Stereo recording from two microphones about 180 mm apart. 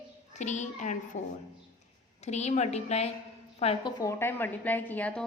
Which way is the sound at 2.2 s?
40° left (ahead or behind).